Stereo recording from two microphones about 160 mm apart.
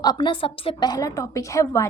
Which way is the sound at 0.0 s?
25° left (ahead or behind).